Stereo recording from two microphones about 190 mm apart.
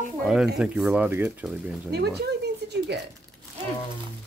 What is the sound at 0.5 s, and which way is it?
Speech, 5° right (ahead or behind).